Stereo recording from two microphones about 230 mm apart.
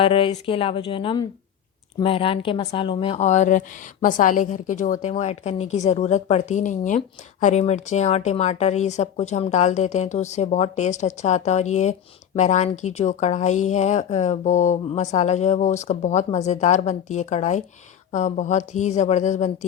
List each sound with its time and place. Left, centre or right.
0.0 s speech: left